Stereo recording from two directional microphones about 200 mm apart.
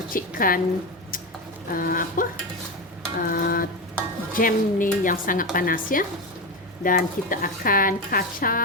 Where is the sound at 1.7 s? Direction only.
45° left (ahead or behind).